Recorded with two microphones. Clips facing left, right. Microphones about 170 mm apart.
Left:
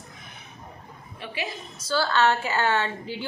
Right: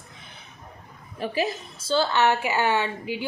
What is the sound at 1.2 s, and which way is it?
Speech, 40° right (ahead or behind).